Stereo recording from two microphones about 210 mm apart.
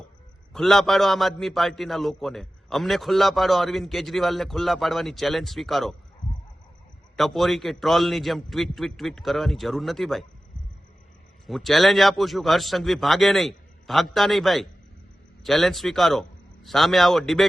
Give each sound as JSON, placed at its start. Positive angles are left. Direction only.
{"t": 0.5, "sound": "a man's voice", "side_deg": 0}
{"t": 7.2, "sound": "a man's voice", "side_deg": 0}
{"t": 11.4, "sound": "a man's voice", "side_deg": 0}